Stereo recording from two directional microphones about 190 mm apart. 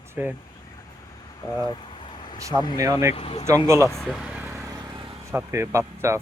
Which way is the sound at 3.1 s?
30° left (ahead or behind).